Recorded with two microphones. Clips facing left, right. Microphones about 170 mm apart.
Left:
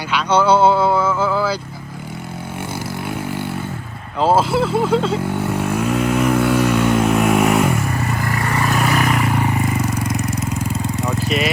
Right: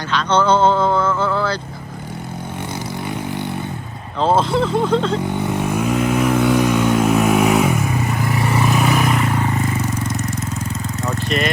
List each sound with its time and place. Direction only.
0.1 s vehicle: 10° left (ahead or behind)
3.1 s vehicle: 5° left (ahead or behind)
11.3 s speech: 5° left (ahead or behind)